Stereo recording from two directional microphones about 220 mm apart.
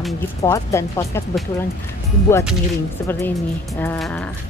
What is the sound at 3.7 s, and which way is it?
Speech, 10° left (ahead or behind).